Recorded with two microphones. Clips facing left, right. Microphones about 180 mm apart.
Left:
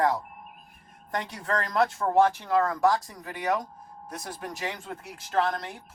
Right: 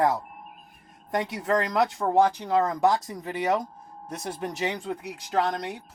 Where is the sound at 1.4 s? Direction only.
20° right (ahead or behind).